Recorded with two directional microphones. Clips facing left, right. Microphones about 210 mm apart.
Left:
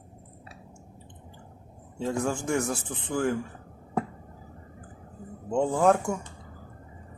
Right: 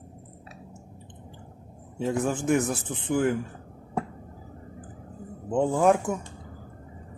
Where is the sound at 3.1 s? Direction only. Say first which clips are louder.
Right 3 dB; 5° right (ahead or behind).